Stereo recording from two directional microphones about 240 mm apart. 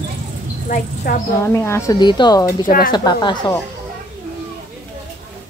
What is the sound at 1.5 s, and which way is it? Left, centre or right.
A woman's voice, centre.